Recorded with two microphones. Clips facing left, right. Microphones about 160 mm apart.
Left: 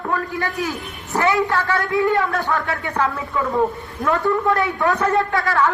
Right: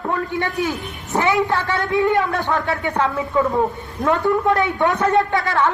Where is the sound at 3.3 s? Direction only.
30° right (ahead or behind).